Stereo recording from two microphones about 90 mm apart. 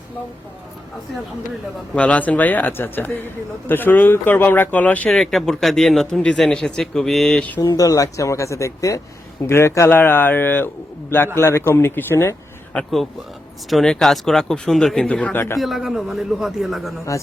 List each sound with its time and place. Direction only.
2.0 s speech: 15° left (ahead or behind)
5.1 s speech: 5° left (ahead or behind)
7.8 s speech: 40° left (ahead or behind)
13.7 s speech: 5° left (ahead or behind)
15.5 s speech: centre (ahead or behind)
17.1 s speech: 35° left (ahead or behind)